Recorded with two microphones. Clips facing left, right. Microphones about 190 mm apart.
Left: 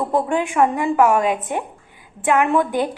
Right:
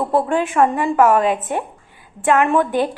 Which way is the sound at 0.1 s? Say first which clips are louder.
Right 2 dB; 15° left (ahead or behind).